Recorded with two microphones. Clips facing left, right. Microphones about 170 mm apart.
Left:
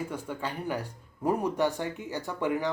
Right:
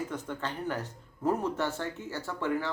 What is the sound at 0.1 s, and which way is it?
A man's voice, 10° left (ahead or behind).